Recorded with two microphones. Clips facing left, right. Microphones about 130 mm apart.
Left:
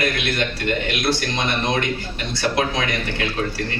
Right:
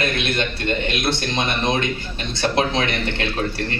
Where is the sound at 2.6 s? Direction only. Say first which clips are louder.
Right 4 dB; 25° right (ahead or behind).